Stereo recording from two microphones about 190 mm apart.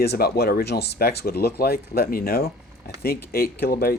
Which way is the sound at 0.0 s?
55° left (ahead or behind).